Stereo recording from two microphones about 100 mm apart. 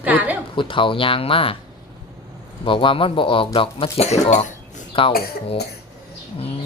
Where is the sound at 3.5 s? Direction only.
80° left.